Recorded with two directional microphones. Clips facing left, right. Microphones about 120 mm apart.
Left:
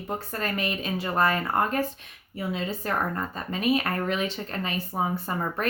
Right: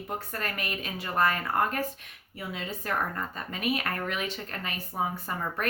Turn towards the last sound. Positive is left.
turn(degrees=30)  # may be behind; listen again after turning